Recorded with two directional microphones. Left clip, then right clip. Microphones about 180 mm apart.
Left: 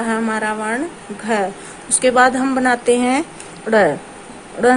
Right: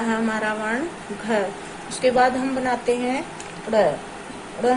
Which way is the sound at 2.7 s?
55° left (ahead or behind).